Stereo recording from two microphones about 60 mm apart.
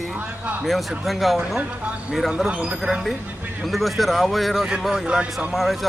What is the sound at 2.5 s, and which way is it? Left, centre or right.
Speech, centre.